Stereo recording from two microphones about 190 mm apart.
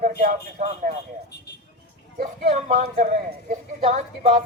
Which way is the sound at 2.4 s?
35° right (ahead or behind).